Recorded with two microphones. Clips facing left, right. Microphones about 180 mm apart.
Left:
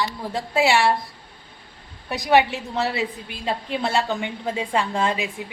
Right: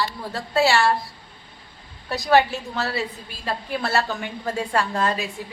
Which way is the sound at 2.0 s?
15° left (ahead or behind).